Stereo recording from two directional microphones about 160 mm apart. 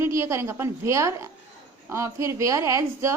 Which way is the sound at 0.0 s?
15° right (ahead or behind).